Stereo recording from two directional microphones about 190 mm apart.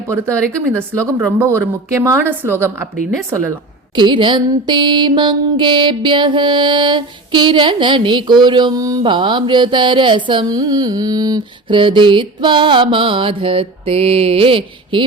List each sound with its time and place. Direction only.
0.1 s speech: 15° right (ahead or behind)
3.9 s music: 25° right (ahead or behind)